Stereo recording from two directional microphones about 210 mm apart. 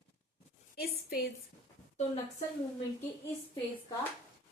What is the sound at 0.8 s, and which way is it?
Speech, 45° left (ahead or behind).